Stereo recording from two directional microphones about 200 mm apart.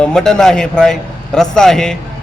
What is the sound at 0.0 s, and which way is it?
A man's voice, 5° left (ahead or behind).